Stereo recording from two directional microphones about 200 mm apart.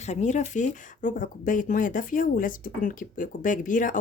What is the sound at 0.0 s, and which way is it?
Speech, 35° left (ahead or behind).